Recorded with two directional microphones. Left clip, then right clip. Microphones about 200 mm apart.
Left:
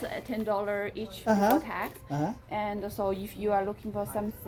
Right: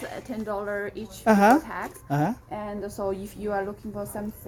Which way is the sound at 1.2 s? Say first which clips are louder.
Right 7 dB; 60° right (ahead or behind).